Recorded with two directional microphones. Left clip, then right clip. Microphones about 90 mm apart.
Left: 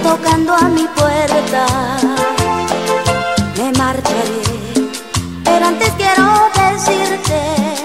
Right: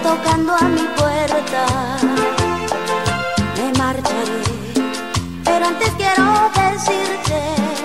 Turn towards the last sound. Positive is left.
turn(degrees=-25)  # may be behind; listen again after turning